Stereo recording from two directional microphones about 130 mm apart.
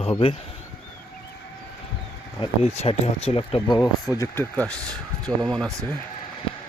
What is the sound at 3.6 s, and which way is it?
Speech, 25° left (ahead or behind).